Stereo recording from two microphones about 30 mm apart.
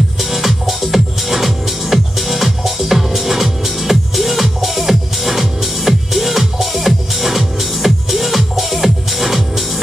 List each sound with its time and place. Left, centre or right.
0.2 s music: centre